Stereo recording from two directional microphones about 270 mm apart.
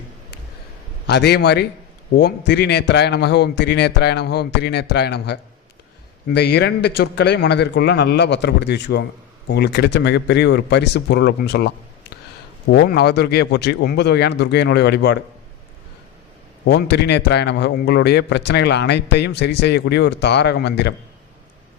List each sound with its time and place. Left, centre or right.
1.0 s a man's voice: left
12.7 s a man's voice: left
16.6 s a man's voice: left